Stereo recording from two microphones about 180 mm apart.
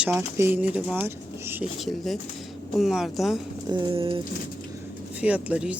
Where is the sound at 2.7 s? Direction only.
Centre (ahead or behind).